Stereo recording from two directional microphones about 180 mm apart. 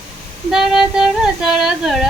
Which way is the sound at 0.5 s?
Centre (ahead or behind).